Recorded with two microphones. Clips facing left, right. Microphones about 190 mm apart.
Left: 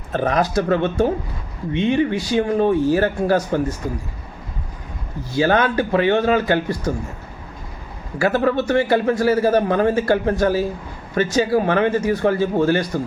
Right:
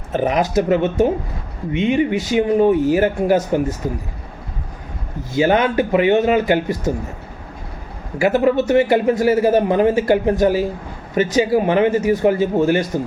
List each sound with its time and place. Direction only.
0.1 s a man's voice: 15° right (ahead or behind)
5.3 s a man's voice: 20° right (ahead or behind)
8.2 s a man's voice: 15° right (ahead or behind)